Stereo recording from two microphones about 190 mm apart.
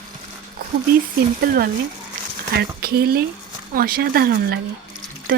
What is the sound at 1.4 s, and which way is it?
Speech, 50° right (ahead or behind).